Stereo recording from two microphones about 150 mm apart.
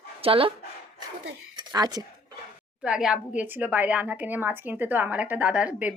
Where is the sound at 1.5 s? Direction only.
25° right (ahead or behind).